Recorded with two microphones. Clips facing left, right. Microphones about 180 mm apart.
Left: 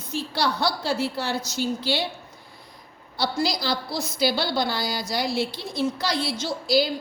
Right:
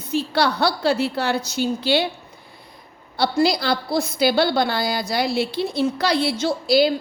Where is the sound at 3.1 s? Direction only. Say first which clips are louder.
Right 6 dB; 60° right (ahead or behind).